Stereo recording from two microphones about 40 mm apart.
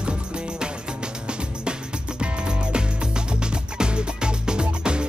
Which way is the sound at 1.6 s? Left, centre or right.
Right.